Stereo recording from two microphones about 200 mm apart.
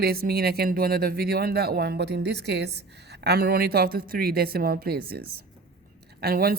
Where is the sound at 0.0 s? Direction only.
50° right (ahead or behind).